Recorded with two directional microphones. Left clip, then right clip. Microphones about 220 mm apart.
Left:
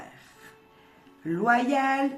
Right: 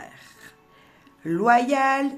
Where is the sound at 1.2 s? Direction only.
40° right (ahead or behind).